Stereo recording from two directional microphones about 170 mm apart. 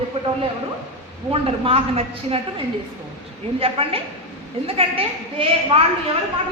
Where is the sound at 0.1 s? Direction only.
35° right (ahead or behind).